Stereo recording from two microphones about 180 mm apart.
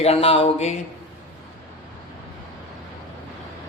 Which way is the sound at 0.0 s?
35° left (ahead or behind).